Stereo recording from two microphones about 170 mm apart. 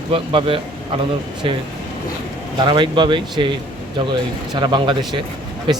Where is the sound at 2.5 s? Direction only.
25° right (ahead or behind).